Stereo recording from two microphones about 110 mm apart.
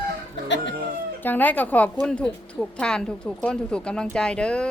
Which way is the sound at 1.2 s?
15° left (ahead or behind).